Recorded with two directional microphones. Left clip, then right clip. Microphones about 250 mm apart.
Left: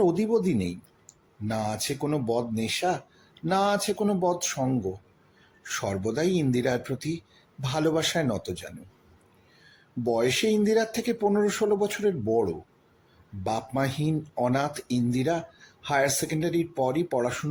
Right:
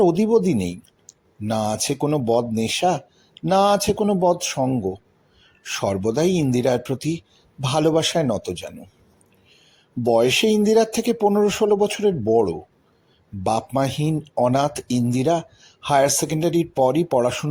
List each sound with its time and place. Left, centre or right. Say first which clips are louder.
0.0 s speech: right 7 dB; centre
10.0 s speech: right 8 dB; right